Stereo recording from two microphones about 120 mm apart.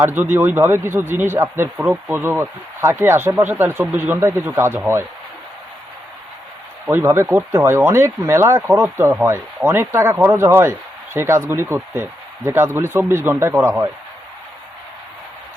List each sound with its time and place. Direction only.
0.0 s speech: 15° right (ahead or behind)
6.9 s speech: 20° right (ahead or behind)